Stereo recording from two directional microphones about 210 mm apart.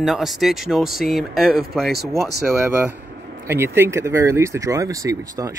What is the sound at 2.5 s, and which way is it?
Speech, 15° right (ahead or behind).